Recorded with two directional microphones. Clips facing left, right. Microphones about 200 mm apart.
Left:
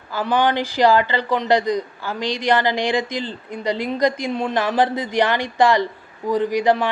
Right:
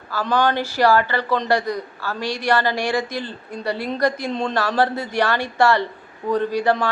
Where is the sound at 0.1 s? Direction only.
15° left (ahead or behind).